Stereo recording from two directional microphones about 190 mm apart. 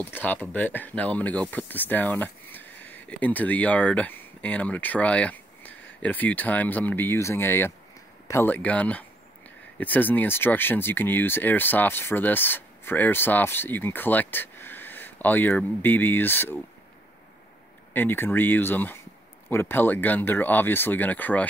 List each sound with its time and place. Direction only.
0.0 s speech: 10° left (ahead or behind)
17.9 s speech: 10° left (ahead or behind)